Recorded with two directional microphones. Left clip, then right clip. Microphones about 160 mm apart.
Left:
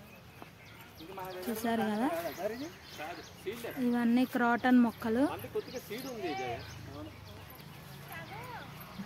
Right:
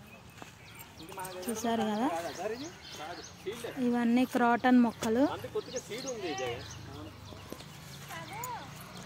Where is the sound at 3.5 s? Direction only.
15° right (ahead or behind).